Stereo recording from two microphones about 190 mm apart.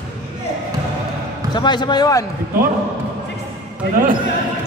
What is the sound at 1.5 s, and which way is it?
Speech, 25° left (ahead or behind).